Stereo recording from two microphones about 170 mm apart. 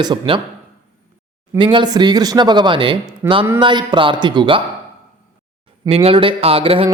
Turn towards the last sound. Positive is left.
turn(degrees=-30)  # may be behind; listen again after turning